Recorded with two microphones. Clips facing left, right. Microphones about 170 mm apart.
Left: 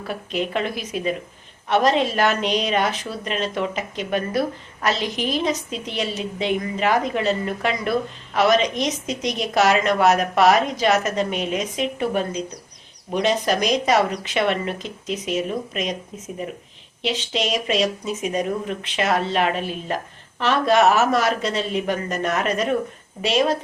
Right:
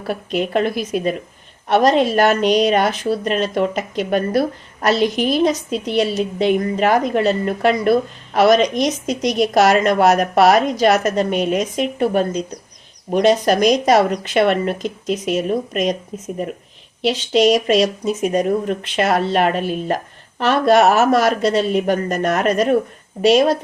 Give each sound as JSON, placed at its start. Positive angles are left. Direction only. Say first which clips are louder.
{"t": 0.1, "sound": "a woman's voice", "louder": "right 6 dB", "side_deg": -45}
{"t": 17.0, "sound": "a woman's voice", "louder": "right 9 dB", "side_deg": -40}